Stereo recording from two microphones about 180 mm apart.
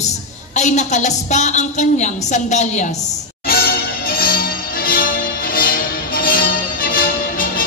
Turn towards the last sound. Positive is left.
turn(degrees=55)  # may be behind; listen again after turning